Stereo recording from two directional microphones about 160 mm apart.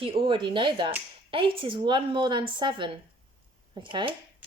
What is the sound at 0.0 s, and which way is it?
Speech, 35° right (ahead or behind).